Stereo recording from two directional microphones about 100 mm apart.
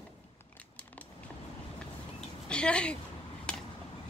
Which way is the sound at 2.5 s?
10° left (ahead or behind).